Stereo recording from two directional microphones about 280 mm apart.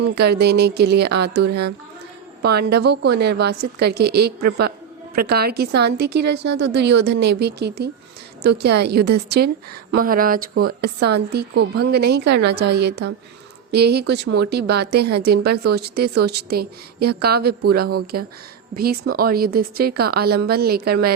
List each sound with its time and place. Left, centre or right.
0.2 s speech: right